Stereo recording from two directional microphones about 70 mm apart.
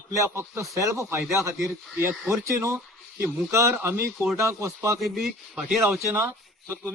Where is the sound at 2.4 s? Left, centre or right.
Right.